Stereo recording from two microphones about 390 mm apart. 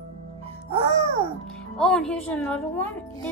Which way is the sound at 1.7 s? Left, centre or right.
Centre.